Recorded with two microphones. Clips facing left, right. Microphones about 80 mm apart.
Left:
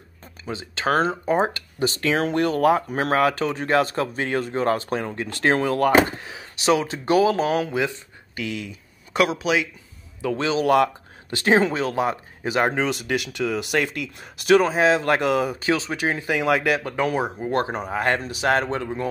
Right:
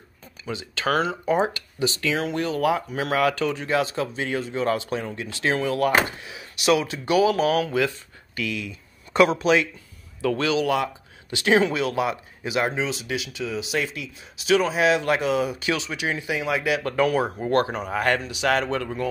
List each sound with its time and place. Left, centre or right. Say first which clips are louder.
0.5 s speech: left 2 dB; left
3.6 s speech: left 6 dB; left
9.1 s speech: right 3 dB; centre
10.2 s speech: right 1 dB; left
10.6 s speech: left 5 dB; left
15.0 s speech: left 2 dB; left
16.3 s speech: left 5 dB; left
16.8 s speech: right 2 dB; left